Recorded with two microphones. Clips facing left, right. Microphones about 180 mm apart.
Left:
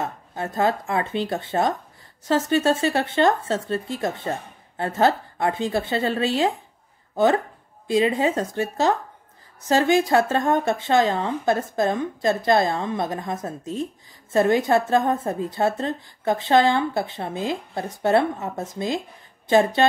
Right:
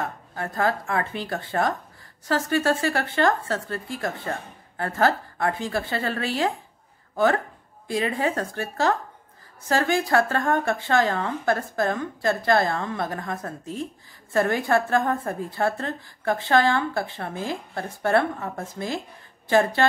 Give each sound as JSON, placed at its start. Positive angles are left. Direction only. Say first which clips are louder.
{"t": 0.0, "sound": "a woman's voice", "louder": "left 2 dB", "side_deg": 20}
{"t": 7.9, "sound": "a woman's voice", "louder": "left 5 dB", "side_deg": 20}